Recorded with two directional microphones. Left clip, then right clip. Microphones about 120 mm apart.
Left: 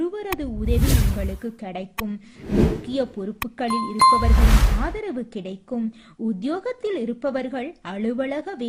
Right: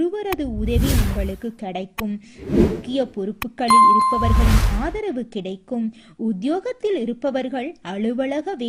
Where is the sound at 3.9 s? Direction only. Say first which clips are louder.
Left 1 dB; centre (ahead or behind).